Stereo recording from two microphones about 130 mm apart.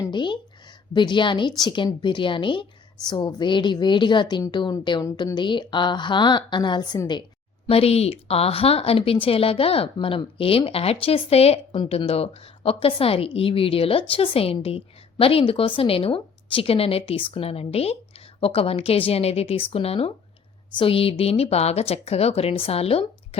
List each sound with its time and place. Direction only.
0.1 s a sound: 35° left (ahead or behind)
0.9 s a woman's voice: 35° left (ahead or behind)
7.7 s a woman's voice: 50° left (ahead or behind)